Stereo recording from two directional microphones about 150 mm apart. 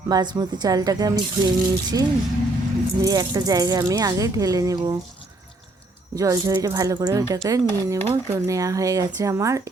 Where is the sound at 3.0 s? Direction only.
25° right (ahead or behind).